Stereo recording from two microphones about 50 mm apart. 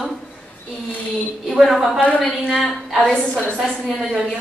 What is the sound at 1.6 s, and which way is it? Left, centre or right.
A woman's voice, centre.